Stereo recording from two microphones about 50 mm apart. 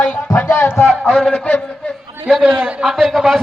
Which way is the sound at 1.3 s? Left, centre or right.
Left.